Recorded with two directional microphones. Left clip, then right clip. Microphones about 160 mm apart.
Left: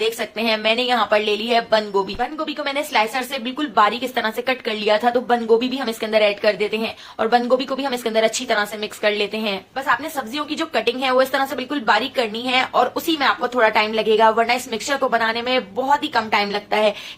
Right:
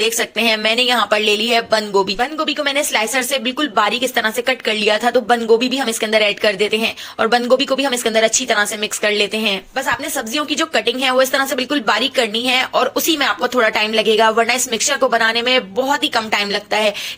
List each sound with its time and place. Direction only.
0.3 s a woman's voice: 25° right (ahead or behind)